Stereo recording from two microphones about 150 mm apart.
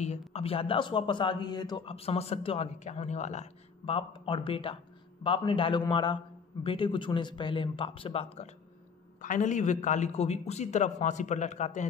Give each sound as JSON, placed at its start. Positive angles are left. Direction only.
{"t": 0.3, "sound": "a man's voice", "side_deg": 40}
{"t": 9.2, "sound": "a man's voice", "side_deg": 55}